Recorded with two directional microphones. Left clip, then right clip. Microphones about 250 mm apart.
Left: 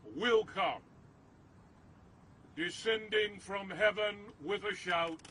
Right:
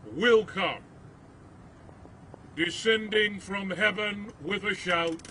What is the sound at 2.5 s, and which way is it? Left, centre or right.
Speech, left.